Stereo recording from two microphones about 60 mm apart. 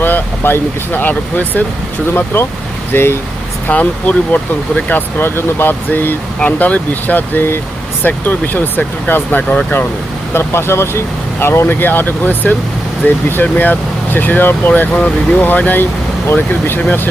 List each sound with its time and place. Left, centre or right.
0.0 s speech: left
2.1 s speech: left
3.7 s speech: left
10.3 s speech: left